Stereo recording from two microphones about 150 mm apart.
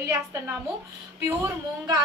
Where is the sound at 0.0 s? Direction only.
20° right (ahead or behind).